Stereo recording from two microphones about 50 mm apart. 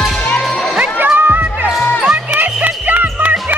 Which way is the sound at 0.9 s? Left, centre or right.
Right.